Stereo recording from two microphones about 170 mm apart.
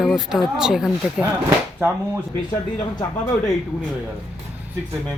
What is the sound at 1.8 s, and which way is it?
Speech, 10° right (ahead or behind).